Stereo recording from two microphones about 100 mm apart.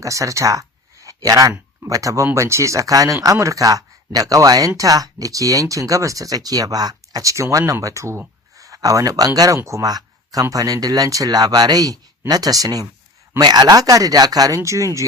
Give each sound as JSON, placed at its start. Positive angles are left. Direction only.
{"t": 0.0, "sound": "speech", "side_deg": -30}